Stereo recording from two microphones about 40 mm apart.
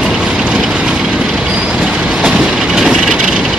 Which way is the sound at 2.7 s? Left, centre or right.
Centre.